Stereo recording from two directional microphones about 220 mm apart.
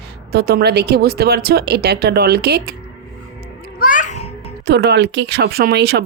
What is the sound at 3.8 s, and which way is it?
Babbling, 40° left (ahead or behind).